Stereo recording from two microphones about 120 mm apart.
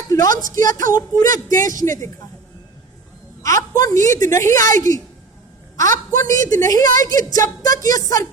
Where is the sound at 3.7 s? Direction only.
30° left (ahead or behind).